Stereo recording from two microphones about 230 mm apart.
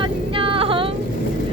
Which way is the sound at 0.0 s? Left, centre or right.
Right.